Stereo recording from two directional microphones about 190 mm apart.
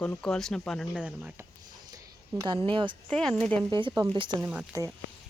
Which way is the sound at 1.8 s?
20° right (ahead or behind).